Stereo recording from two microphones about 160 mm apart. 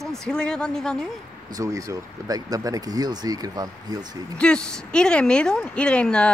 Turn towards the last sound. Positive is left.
turn(degrees=5)  # may be behind; listen again after turning